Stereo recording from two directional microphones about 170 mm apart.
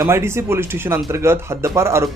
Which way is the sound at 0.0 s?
15° right (ahead or behind).